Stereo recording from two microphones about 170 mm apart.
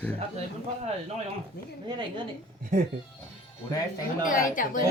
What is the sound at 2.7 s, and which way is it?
Speech, 55° right (ahead or behind).